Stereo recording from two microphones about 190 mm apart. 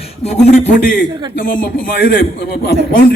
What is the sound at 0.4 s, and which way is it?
Speech, 35° left (ahead or behind).